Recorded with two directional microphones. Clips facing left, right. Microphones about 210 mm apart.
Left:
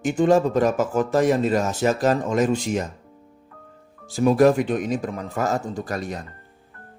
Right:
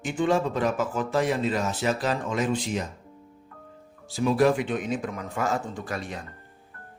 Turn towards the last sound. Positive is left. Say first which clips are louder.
# left 5 dB
turn(degrees=40)  # may be behind; listen again after turning